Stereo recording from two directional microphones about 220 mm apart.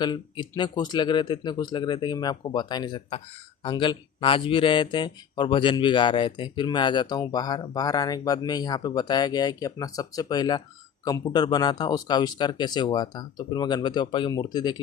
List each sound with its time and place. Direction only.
0.0 s speech: 20° left (ahead or behind)